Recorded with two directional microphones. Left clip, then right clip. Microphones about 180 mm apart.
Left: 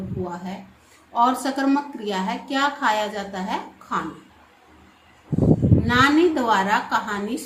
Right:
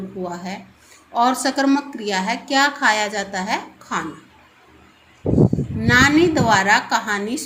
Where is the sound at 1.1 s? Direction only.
15° right (ahead or behind).